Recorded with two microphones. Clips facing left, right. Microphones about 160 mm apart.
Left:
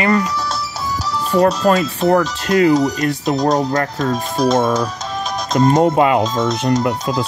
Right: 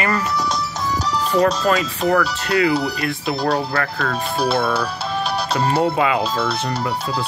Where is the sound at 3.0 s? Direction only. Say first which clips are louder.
Left 5 dB; 40° left (ahead or behind).